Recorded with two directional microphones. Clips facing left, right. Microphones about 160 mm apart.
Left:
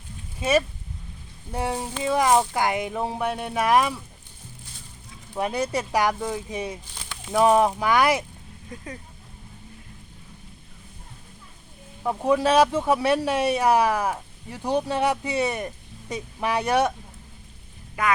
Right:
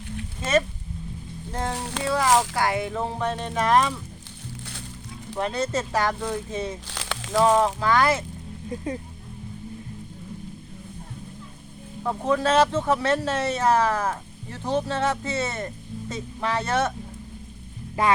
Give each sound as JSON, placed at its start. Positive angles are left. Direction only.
{"t": 1.7, "sound": "speech", "side_deg": -80}
{"t": 2.0, "sound": "speech", "side_deg": 15}
{"t": 2.3, "sound": "speech", "side_deg": -90}
{"t": 2.6, "sound": "speech", "side_deg": 15}
{"t": 5.3, "sound": "speech", "side_deg": 10}
{"t": 6.8, "sound": "a sound", "side_deg": -90}
{"t": 7.3, "sound": "speech", "side_deg": 15}
{"t": 8.7, "sound": "speech", "side_deg": -25}
{"t": 12.0, "sound": "speech", "side_deg": 10}
{"t": 18.0, "sound": "speech", "side_deg": -30}